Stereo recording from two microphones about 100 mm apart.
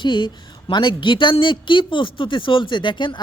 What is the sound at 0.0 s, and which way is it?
A woman's voice, 50° left (ahead or behind).